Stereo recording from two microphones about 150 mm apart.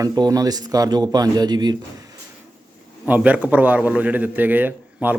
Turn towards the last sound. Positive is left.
turn(degrees=-10)  # may be behind; listen again after turning